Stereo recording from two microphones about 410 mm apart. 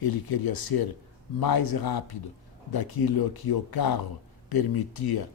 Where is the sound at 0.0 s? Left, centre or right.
Left.